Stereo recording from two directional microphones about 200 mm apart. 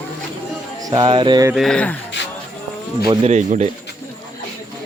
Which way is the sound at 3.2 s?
35° right (ahead or behind).